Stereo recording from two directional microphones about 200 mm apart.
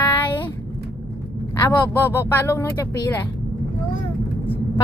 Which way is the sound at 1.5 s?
15° left (ahead or behind).